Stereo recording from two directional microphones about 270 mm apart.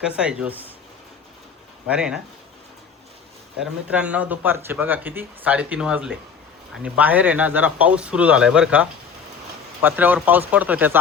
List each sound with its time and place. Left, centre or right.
0.2 s speech: centre
1.9 s speech: centre
3.6 s speech: centre